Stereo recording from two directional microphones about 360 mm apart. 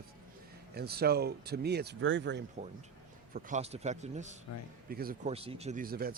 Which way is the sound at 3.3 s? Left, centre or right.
Centre.